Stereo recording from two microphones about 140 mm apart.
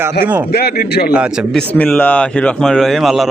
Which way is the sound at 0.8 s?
90° left.